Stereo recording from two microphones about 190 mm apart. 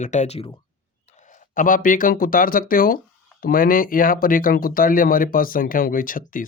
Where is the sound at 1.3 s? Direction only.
45° left (ahead or behind).